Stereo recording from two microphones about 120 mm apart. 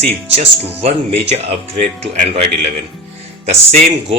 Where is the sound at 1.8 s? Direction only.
90° right.